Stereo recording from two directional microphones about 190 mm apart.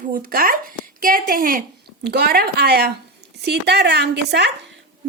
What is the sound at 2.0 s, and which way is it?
A woman's voice, 60° right (ahead or behind).